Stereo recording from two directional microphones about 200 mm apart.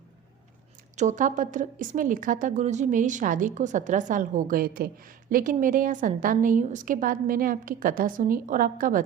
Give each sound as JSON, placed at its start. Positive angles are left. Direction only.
{"t": 0.9, "sound": "a woman's voice", "side_deg": -40}